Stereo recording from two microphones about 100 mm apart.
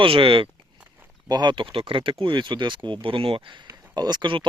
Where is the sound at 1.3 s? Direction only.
45° right (ahead or behind).